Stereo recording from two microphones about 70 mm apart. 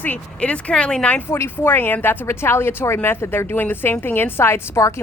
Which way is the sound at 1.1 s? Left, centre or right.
Left.